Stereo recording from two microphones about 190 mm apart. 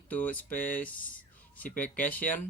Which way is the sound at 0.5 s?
45° left (ahead or behind).